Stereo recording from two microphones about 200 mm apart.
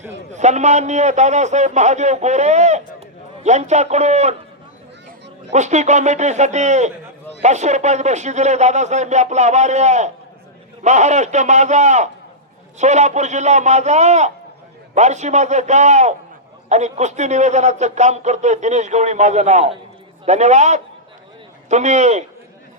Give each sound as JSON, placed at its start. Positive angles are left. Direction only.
{"t": 0.3, "sound": "a man's voice", "side_deg": -35}
{"t": 5.5, "sound": "a man's voice", "side_deg": -35}